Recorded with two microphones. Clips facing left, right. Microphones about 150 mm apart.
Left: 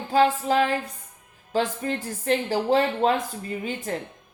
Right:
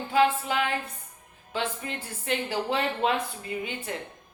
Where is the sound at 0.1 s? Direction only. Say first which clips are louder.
Left 4 dB; 35° left (ahead or behind).